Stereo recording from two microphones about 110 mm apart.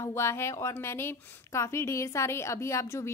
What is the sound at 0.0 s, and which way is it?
A woman's voice, 25° left (ahead or behind).